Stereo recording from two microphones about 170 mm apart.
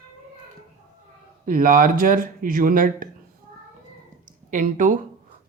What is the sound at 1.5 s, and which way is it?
Speech, 55° right (ahead or behind).